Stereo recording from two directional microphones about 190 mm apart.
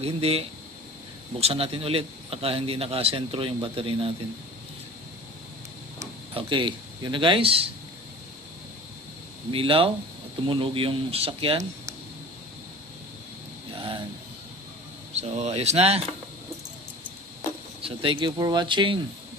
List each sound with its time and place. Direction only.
0.0 s a man's voice: 30° right (ahead or behind)
5.9 s speech: 30° right (ahead or behind)
9.5 s speech: 30° right (ahead or behind)
13.7 s a sound: 25° right (ahead or behind)
15.1 s a man's voice: 35° right (ahead or behind)
17.8 s speech: 25° right (ahead or behind)